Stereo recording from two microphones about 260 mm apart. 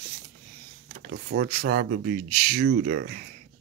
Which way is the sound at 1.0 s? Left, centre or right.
Right.